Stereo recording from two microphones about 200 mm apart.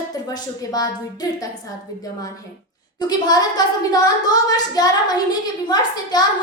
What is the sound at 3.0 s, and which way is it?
A woman's voice, 20° left (ahead or behind).